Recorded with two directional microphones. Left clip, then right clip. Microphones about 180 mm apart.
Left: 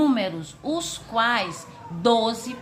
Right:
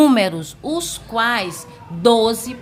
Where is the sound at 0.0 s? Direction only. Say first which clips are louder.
Right 8 dB; 50° right (ahead or behind).